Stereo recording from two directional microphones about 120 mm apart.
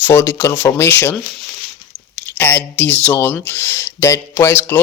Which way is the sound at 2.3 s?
15° left (ahead or behind).